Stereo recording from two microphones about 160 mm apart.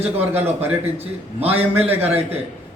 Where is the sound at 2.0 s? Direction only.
15° right (ahead or behind).